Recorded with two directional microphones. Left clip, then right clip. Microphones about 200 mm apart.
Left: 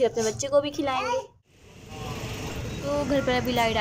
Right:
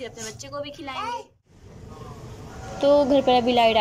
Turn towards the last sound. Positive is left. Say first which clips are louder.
# right 6 dB
turn(degrees=0)  # may be behind; listen again after turning